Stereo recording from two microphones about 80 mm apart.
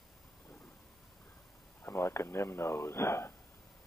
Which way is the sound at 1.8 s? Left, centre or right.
Left.